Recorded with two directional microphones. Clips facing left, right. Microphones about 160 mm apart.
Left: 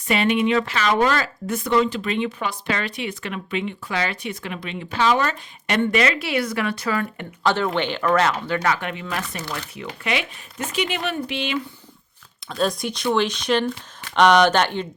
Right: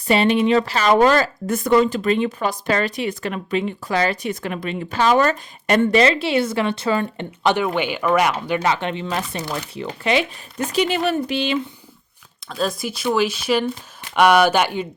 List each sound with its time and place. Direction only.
0.1 s speech: 30° right (ahead or behind)
7.5 s speech: 10° right (ahead or behind)
9.7 s speech: 30° right (ahead or behind)
12.5 s speech: centre (ahead or behind)